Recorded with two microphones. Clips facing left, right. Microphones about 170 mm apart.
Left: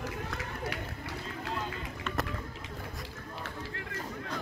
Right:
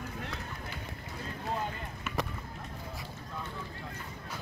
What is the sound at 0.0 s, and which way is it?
Run, 90° left.